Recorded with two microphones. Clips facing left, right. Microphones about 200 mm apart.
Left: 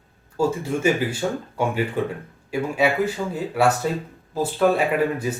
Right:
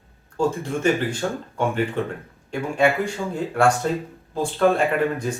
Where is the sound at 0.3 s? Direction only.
10° left (ahead or behind).